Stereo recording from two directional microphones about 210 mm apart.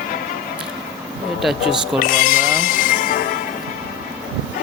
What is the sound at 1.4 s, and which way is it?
Speech, centre (ahead or behind).